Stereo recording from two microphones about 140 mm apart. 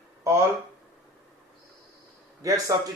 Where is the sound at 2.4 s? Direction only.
25° right (ahead or behind).